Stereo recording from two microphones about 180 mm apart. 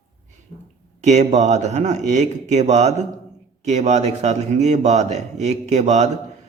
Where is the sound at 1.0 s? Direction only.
40° right (ahead or behind).